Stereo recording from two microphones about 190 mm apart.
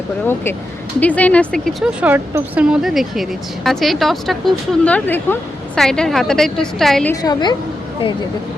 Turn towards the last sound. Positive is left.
turn(degrees=20)  # may be behind; listen again after turning